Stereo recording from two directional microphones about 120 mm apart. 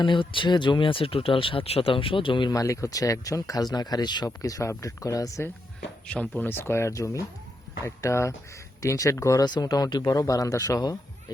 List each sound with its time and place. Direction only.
0.0 s speech: 45° left (ahead or behind)
2.6 s speech: 30° left (ahead or behind)
6.1 s speech: 10° left (ahead or behind); by 10.9 s 30° left (ahead or behind)